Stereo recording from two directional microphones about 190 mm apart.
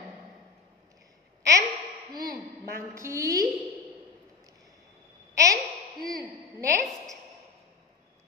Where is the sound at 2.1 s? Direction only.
20° right (ahead or behind).